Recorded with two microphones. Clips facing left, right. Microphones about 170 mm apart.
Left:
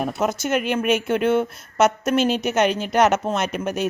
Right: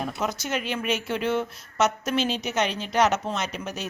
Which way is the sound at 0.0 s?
50° left (ahead or behind).